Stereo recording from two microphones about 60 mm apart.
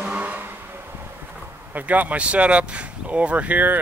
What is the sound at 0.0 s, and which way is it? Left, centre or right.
Vehicle, right.